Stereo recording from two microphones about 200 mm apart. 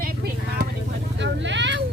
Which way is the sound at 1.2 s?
65° right (ahead or behind).